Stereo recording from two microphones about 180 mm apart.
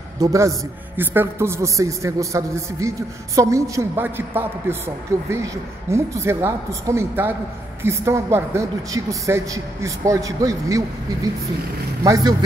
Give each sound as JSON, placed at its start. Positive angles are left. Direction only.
{"t": 0.2, "sound": "a woman's voice", "side_deg": -15}
{"t": 12.0, "sound": "speech", "side_deg": -20}